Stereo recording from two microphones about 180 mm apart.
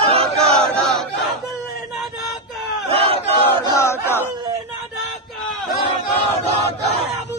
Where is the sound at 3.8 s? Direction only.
15° left (ahead or behind).